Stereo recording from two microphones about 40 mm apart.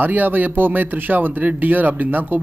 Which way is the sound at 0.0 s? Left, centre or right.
Right.